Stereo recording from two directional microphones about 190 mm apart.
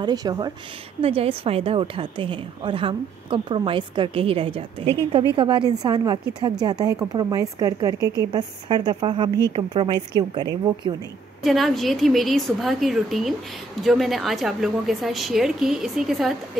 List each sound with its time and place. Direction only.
0.0 s a woman's voice: 20° right (ahead or behind)
11.4 s a woman's voice: centre (ahead or behind)